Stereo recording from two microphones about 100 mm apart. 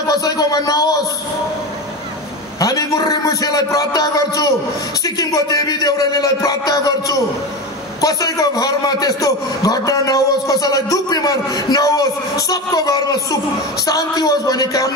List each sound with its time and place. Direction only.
0.1 s a man's voice: 40° left (ahead or behind)
2.6 s a man's voice: 35° left (ahead or behind)